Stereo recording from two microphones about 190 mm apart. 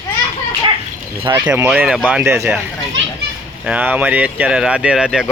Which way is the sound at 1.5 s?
5° right (ahead or behind).